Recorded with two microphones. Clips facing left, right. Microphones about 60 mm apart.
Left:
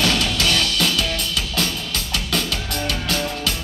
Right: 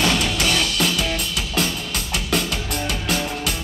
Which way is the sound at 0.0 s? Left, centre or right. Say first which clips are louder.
Even; right.